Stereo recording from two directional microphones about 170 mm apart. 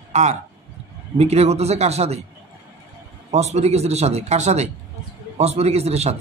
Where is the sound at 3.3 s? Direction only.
40° right (ahead or behind).